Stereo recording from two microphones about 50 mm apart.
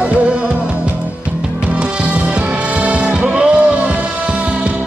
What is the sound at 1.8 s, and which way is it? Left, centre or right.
Music, right.